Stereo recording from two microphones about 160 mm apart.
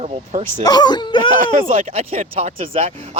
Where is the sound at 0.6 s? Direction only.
25° left (ahead or behind).